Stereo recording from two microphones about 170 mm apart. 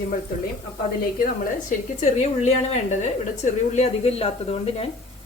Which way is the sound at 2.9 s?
45° left (ahead or behind).